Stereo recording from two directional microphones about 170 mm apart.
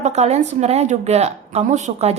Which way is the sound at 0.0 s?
40° right (ahead or behind).